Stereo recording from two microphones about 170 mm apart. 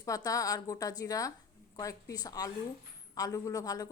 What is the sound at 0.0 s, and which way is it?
A woman's voice, 20° left (ahead or behind).